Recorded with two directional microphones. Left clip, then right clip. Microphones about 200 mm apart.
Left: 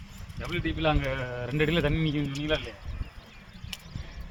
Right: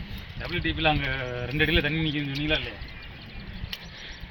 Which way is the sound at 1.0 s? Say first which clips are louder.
Right 2 dB; 65° left (ahead or behind).